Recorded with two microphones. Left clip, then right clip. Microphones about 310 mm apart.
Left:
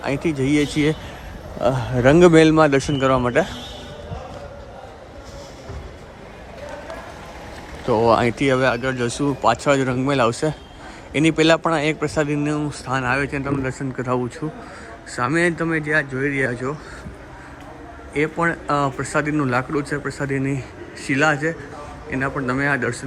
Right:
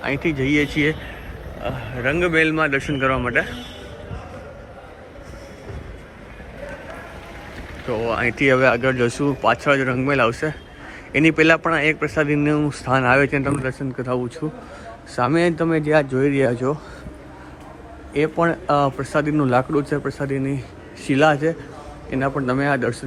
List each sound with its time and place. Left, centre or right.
0.0 s a man's voice: centre
7.9 s a man's voice: centre
18.1 s a man's voice: centre